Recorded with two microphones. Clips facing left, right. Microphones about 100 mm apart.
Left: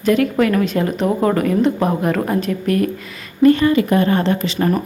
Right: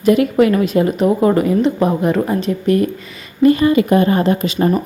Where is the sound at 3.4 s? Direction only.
20° right (ahead or behind).